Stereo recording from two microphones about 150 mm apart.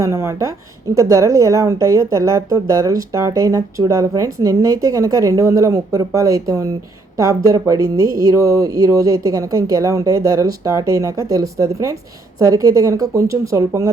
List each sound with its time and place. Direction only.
0.0 s speech: 15° right (ahead or behind)